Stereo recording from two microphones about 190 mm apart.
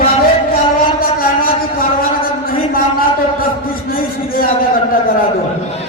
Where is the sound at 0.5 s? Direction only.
50° left (ahead or behind).